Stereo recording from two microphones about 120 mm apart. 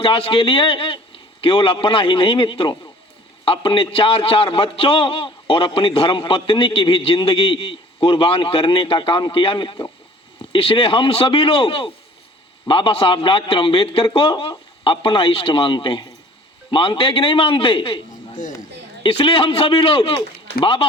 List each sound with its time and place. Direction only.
0.0 s a man's voice: 45° left (ahead or behind)
19.0 s a man's voice: 50° left (ahead or behind)